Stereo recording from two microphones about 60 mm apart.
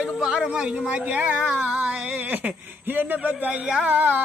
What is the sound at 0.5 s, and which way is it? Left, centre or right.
Speech, centre.